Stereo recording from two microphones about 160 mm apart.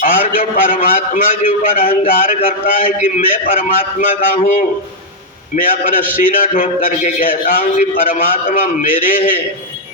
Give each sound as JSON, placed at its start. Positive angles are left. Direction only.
{"t": 0.0, "sound": "a man's voice", "side_deg": 60}